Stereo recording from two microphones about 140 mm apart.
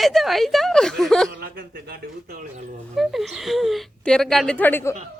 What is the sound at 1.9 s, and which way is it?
Speech, 90° right.